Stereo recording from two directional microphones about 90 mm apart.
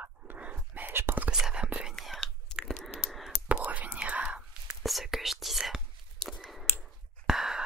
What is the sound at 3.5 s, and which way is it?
Whispering, 15° right (ahead or behind).